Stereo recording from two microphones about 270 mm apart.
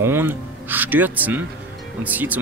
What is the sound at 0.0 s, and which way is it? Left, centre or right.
Speech, centre.